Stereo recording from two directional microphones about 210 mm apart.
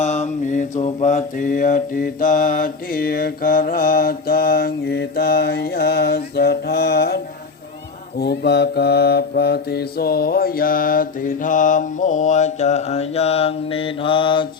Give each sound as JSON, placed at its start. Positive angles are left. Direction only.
{"t": 0.0, "sound": "mantra", "side_deg": 35}
{"t": 8.2, "sound": "mantra", "side_deg": 50}